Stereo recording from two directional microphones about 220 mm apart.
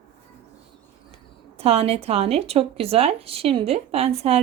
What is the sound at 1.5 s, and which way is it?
Speech, 25° right (ahead or behind).